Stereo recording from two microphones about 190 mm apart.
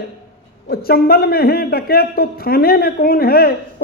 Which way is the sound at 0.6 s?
55° left (ahead or behind).